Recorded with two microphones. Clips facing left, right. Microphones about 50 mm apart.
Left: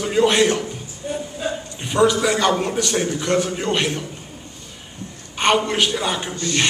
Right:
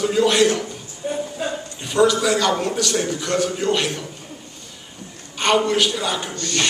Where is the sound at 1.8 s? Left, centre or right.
Left.